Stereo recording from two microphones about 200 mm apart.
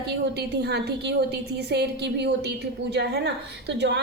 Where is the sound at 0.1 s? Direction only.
55° right (ahead or behind).